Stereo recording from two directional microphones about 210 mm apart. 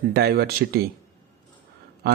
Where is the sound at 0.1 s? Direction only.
50° right (ahead or behind).